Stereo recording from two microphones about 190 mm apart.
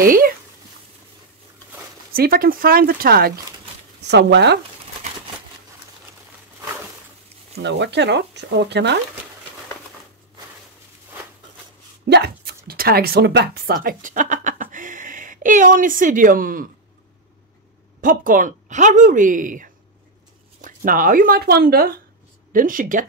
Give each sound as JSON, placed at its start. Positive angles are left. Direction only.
{"t": 0.0, "sound": "speech", "side_deg": -50}
{"t": 2.1, "sound": "speech", "side_deg": -50}
{"t": 4.0, "sound": "speech", "side_deg": -65}
{"t": 7.5, "sound": "speech", "side_deg": -65}
{"t": 12.1, "sound": "speech", "side_deg": -55}
{"t": 18.0, "sound": "speech", "side_deg": -45}